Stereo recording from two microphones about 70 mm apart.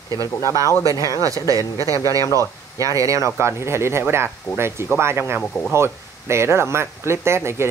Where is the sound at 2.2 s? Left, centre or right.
Left.